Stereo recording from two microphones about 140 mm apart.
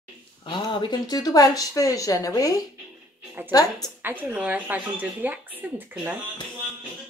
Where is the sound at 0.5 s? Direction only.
35° left (ahead or behind).